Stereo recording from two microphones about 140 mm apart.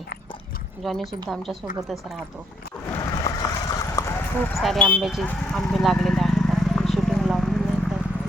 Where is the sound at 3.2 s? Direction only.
25° left (ahead or behind).